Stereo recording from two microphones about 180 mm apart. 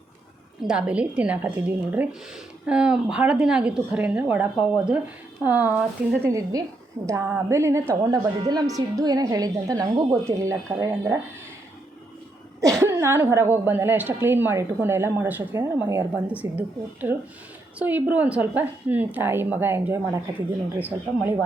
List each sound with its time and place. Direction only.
0.6 s a woman's voice: 5° right (ahead or behind)
6.2 s a woman's voice: 15° right (ahead or behind)
12.8 s a woman's voice: 15° right (ahead or behind)